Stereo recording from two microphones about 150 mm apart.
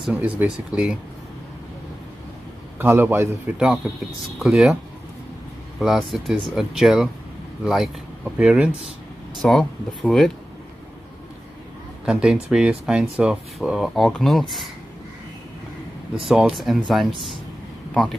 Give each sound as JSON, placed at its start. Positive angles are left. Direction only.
{"t": 0.0, "sound": "a man's voice", "side_deg": -10}
{"t": 2.8, "sound": "a man's voice", "side_deg": -15}
{"t": 3.5, "sound": "speech", "side_deg": 0}
{"t": 5.8, "sound": "speech", "side_deg": 0}
{"t": 12.1, "sound": "speech", "side_deg": -5}
{"t": 16.3, "sound": "speech", "side_deg": -5}